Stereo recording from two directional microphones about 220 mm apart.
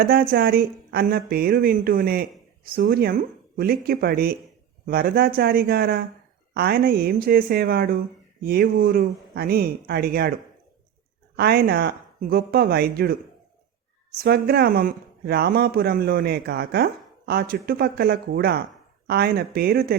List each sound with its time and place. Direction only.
0.0 s speech: 40° right (ahead or behind)
11.3 s speech: 45° right (ahead or behind)